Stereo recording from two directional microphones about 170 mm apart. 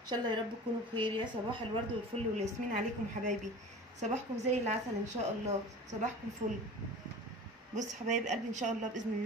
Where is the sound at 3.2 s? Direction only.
45° right (ahead or behind).